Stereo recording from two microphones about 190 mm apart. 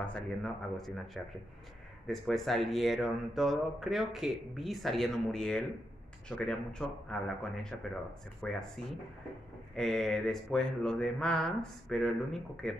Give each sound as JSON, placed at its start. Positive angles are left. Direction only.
{"t": 0.0, "sound": "speech", "side_deg": 5}